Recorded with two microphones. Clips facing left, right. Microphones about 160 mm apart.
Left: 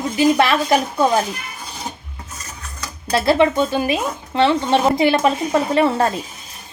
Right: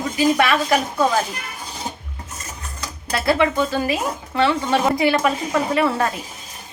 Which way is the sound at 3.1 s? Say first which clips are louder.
Left 3 dB; 25° left (ahead or behind).